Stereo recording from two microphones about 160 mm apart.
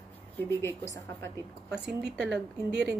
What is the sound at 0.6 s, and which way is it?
Speech, 15° left (ahead or behind).